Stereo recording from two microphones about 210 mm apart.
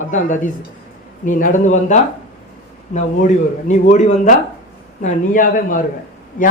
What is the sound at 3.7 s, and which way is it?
Speech, 35° left (ahead or behind).